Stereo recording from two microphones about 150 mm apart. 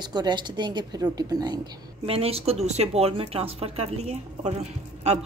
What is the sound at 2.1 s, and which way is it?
Speech, 40° right (ahead or behind).